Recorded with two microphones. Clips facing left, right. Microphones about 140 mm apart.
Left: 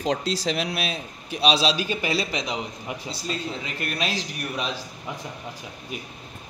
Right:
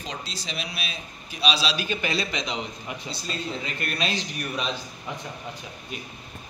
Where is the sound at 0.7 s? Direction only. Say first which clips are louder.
Left 7 dB; 65° left (ahead or behind).